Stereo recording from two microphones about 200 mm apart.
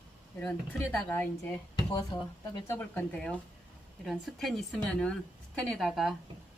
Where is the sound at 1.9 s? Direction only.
20° left (ahead or behind); by 6.1 s centre (ahead or behind).